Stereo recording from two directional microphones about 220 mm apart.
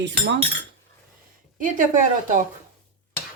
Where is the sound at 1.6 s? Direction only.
35° right (ahead or behind).